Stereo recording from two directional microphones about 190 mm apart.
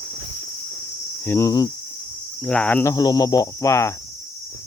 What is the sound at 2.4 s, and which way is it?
Cricket, 5° left (ahead or behind).